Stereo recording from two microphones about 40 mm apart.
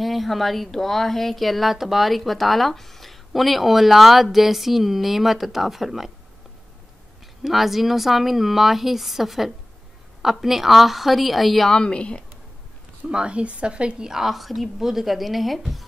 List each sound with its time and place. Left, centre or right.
0.0 s a woman's voice: centre
7.4 s a woman's voice: centre
11.7 s a woman's voice: left
13.1 s speech: right
14.0 s a woman's voice: centre